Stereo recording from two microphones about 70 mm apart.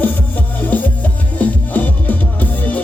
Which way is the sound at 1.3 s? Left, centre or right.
Left.